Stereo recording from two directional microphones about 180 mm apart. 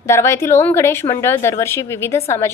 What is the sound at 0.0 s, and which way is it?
A woman's voice, 15° left (ahead or behind).